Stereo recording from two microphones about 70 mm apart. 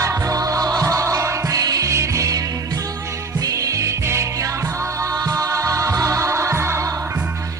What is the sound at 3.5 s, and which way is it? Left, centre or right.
Music, right.